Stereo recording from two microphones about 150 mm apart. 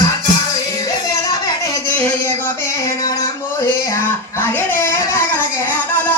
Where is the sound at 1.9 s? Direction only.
15° left (ahead or behind).